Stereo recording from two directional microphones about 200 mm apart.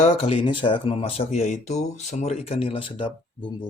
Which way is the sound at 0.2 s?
25° left (ahead or behind).